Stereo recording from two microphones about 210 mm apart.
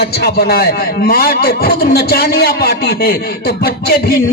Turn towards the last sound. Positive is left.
turn(degrees=50)  # may be behind; listen again after turning